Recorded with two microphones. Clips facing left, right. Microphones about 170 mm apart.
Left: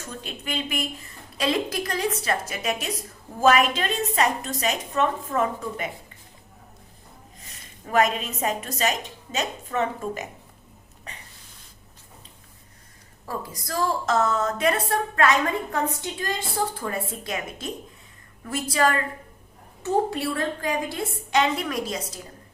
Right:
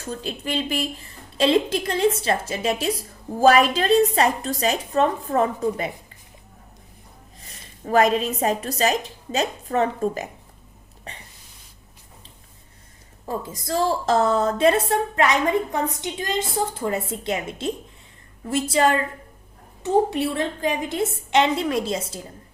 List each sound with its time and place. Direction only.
0.2 s a woman's voice: 35° right (ahead or behind)
7.9 s a woman's voice: 35° right (ahead or behind)
13.2 s a woman's voice: 25° right (ahead or behind)